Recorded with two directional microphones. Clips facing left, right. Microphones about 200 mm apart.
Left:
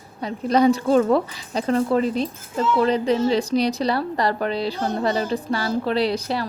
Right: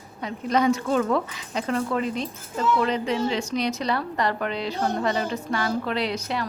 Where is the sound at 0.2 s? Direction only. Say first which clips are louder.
Left 5 dB; 35° left (ahead or behind).